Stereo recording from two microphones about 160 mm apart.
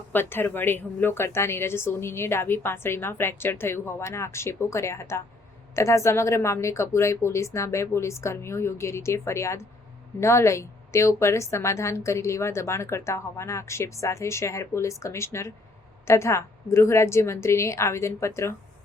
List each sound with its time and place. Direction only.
0.1 s a woman's voice: 15° left (ahead or behind)